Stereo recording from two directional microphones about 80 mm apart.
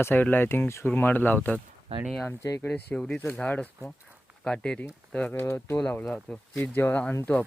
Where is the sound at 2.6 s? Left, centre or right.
Left.